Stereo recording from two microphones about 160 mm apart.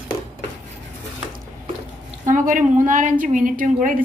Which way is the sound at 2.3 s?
55° right (ahead or behind).